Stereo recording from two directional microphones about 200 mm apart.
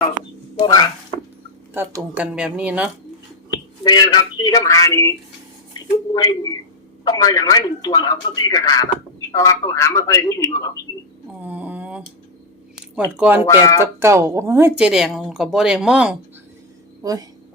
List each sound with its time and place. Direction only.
0.6 s speech: 20° left (ahead or behind)
1.7 s speech: 10° right (ahead or behind)
3.8 s speech: 20° left (ahead or behind)
7.0 s speech: 20° left (ahead or behind)
11.3 s a sound: 10° right (ahead or behind)
13.1 s speech: 10° right (ahead or behind)
13.5 s speech: 15° left (ahead or behind)
13.8 s speech: 15° right (ahead or behind)
17.0 s speech: 20° right (ahead or behind)